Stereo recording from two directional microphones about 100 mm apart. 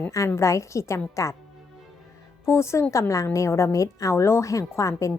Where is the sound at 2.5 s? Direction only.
30° left (ahead or behind).